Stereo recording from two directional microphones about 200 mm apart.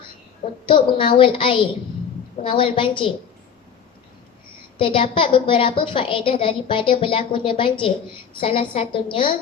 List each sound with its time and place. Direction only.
0.7 s a woman's voice: 25° left (ahead or behind)
4.8 s a woman's voice: 25° left (ahead or behind)